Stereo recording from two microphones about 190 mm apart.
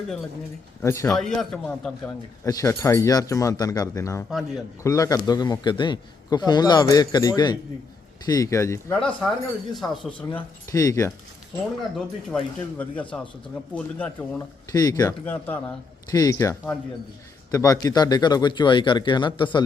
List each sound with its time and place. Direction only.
0.8 s a man's voice: 10° left (ahead or behind)
2.4 s a man's voice: 15° left (ahead or behind)
9.0 s a man's voice: 5° left (ahead or behind)
10.2 s speech: 20° left (ahead or behind)
11.9 s speech: 5° left (ahead or behind)
15.2 s a man's voice: 10° left (ahead or behind); by 19.6 s 25° left (ahead or behind)